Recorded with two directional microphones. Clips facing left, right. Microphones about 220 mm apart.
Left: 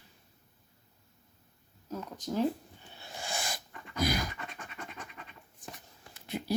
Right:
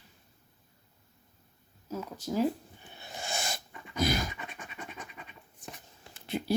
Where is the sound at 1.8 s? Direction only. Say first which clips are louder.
Right 2 dB; 5° right (ahead or behind).